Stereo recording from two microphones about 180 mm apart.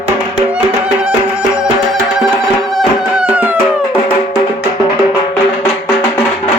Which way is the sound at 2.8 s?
5° right (ahead or behind).